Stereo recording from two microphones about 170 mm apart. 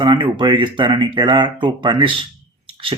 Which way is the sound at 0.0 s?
30° right (ahead or behind).